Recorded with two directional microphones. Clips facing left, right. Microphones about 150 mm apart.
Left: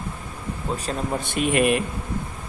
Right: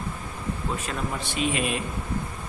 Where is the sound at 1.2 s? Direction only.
55° left (ahead or behind).